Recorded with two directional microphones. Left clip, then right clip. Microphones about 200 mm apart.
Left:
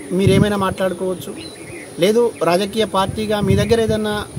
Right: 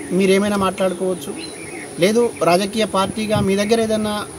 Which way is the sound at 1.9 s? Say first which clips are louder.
Left 1 dB; 5° left (ahead or behind).